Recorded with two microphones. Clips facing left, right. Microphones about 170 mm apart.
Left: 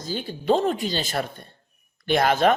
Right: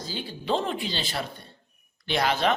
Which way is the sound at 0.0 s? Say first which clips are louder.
Left 5 dB; 50° left (ahead or behind).